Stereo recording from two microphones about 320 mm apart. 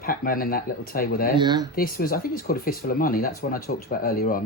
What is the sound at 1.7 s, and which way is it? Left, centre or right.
Speech, left.